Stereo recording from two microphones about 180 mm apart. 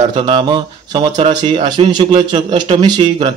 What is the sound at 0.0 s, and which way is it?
A man's voice, 25° right (ahead or behind).